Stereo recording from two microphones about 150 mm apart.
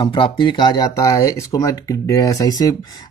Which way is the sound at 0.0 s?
30° left (ahead or behind).